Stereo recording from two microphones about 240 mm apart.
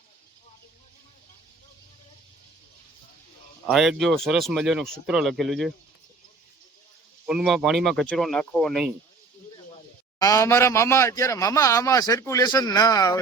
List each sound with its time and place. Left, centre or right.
3.7 s speech: centre
7.3 s speech: centre
10.2 s speech: centre